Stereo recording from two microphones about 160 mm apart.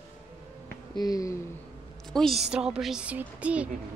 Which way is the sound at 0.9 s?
25° left (ahead or behind).